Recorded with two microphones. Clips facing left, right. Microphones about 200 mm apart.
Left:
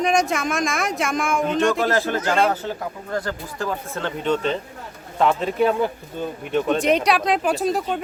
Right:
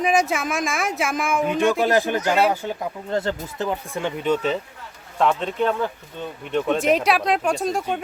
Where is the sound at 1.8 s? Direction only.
15° right (ahead or behind).